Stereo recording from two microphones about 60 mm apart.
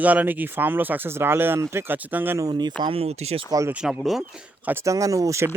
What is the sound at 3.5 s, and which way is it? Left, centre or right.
Speech, right.